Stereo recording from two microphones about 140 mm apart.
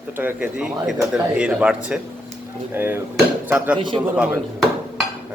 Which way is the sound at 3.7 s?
35° right (ahead or behind).